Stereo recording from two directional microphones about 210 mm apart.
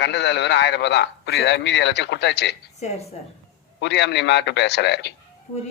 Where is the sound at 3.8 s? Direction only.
55° left (ahead or behind).